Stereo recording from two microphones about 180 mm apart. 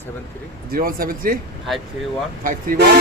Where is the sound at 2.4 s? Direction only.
50° right (ahead or behind).